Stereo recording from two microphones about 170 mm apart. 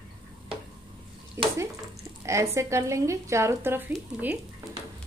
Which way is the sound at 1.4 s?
15° right (ahead or behind).